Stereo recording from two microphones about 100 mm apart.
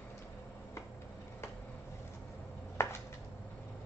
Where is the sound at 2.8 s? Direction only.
25° left (ahead or behind).